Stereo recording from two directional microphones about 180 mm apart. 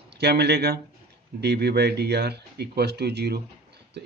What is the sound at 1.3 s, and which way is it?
Speech, 65° right (ahead or behind).